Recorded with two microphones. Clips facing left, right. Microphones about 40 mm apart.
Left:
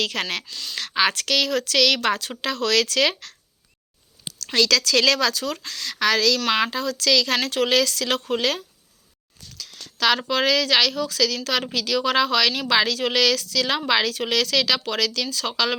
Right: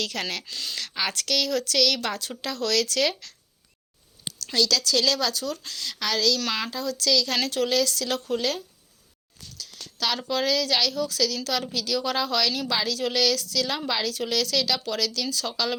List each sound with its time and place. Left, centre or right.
0.0 s speech: left
0.4 s speech: centre
0.8 s speech: left
4.5 s a woman's voice: left
6.7 s a woman's voice: left
9.6 s a woman's voice: left
13.0 s speech: left